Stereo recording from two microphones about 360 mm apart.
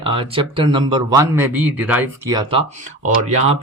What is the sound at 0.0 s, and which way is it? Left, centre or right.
Speech, centre.